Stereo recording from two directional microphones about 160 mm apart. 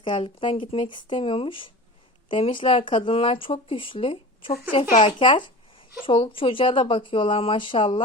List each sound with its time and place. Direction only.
0.0 s speech: 30° left (ahead or behind)